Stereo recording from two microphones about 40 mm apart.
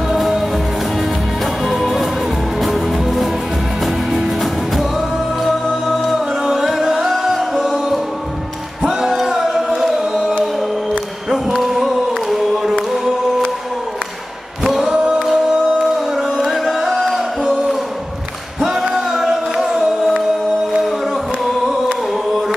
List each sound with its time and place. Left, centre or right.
1.4 s music: centre
9.5 s singing: centre
11.4 s a sound: centre
14.6 s a capella: centre
15.8 s music: centre
18.6 s singing: centre
21.5 s singing: centre